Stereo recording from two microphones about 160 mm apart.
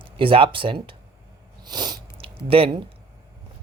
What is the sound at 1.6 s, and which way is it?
Sniff, 25° right (ahead or behind).